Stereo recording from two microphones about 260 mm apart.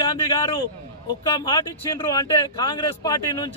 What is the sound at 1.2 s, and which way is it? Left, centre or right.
Speech, centre.